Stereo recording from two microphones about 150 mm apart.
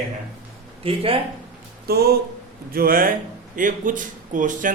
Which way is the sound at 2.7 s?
75° right (ahead or behind).